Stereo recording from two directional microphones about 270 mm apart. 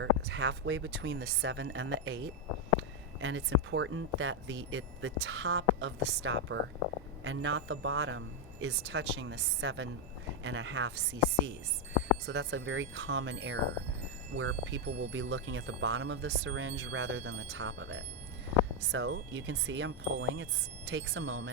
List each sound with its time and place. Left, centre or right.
0.0 s speech: right